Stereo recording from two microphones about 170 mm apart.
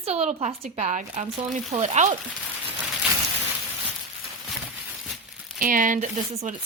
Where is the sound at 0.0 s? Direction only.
35° right (ahead or behind).